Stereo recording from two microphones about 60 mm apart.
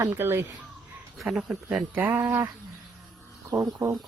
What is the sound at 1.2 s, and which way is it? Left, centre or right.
Speech, centre.